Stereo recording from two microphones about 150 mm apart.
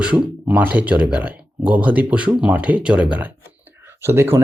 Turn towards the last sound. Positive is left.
turn(degrees=-15)  # may be behind; listen again after turning